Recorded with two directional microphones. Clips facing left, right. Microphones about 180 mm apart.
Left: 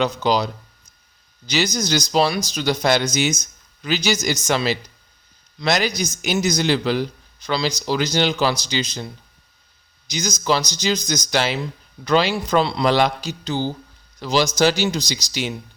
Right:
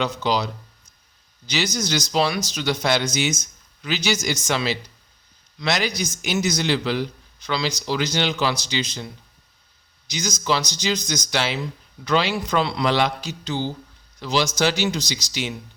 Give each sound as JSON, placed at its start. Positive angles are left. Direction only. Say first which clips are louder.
{"t": 0.0, "sound": "speech", "louder": "left 3 dB", "side_deg": 40}
{"t": 10.1, "sound": "speech", "louder": "left 3 dB", "side_deg": 40}